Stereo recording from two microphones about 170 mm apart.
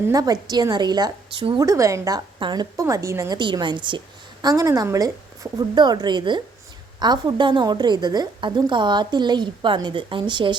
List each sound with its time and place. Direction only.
0.1 s a woman's voice: 20° right (ahead or behind)